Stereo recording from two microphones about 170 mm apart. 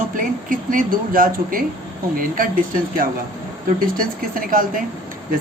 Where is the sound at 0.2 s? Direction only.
50° right (ahead or behind).